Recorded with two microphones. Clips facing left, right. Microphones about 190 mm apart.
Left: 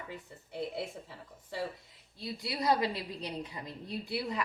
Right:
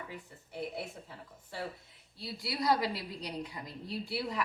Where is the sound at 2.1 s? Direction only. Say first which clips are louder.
Left 1 dB; 20° left (ahead or behind).